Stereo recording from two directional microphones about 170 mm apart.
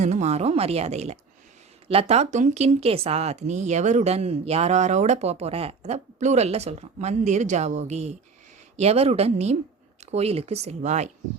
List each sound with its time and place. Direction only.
0.0 s speech: 45° right (ahead or behind)